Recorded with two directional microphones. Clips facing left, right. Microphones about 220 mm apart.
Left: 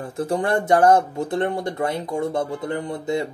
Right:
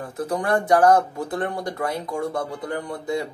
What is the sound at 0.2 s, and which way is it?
Speech, 25° left (ahead or behind).